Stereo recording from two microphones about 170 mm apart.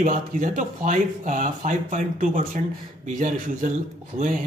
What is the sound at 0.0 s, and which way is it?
Speech, 50° right (ahead or behind).